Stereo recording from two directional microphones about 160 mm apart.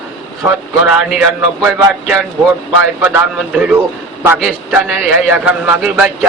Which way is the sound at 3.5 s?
5° right (ahead or behind).